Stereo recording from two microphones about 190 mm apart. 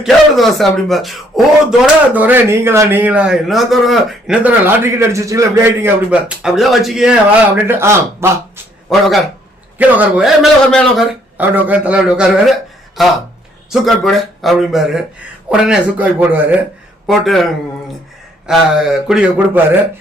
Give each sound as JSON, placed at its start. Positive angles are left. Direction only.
{"t": 0.0, "sound": "a man's voice", "side_deg": 0}
{"t": 8.9, "sound": "a man's voice", "side_deg": 0}
{"t": 17.1, "sound": "a man's voice", "side_deg": 0}